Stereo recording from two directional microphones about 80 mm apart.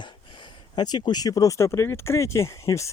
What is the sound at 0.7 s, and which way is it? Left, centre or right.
Speech, left.